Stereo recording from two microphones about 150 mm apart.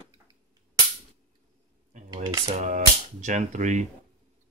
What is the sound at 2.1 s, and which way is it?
Cutlery, 25° right (ahead or behind).